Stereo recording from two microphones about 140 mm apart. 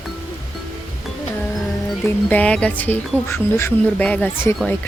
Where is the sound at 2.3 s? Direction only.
10° left (ahead or behind).